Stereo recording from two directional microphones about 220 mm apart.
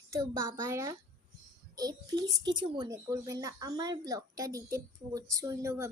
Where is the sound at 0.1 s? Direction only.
15° right (ahead or behind).